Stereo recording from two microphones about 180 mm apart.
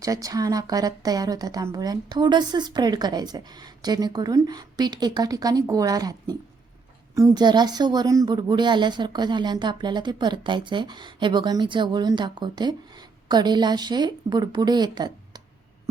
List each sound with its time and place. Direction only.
0.0 s speech: 20° right (ahead or behind)